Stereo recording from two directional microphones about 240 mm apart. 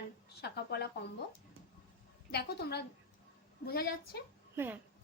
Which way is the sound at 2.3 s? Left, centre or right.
Left.